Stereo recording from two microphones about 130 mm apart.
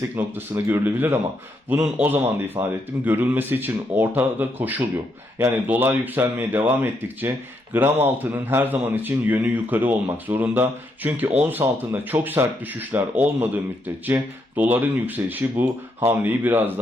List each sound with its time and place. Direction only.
0.2 s speech: 15° right (ahead or behind)